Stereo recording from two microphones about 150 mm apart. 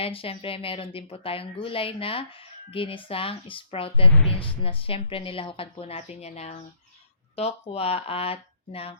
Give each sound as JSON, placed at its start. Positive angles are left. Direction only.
{"t": 0.0, "sound": "speech", "side_deg": 40}